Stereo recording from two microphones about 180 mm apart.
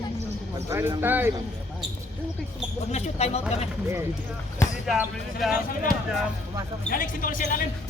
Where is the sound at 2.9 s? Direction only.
35° left (ahead or behind).